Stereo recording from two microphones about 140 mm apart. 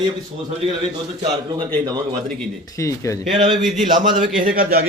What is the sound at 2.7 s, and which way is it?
Speech, 25° left (ahead or behind).